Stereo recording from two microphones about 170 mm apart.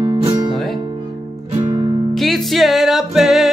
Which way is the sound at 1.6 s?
25° right (ahead or behind).